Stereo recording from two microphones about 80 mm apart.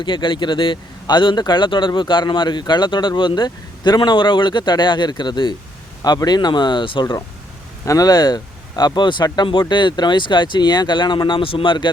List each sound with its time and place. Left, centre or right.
0.0 s speech: left
6.0 s speech: left
7.9 s speech: left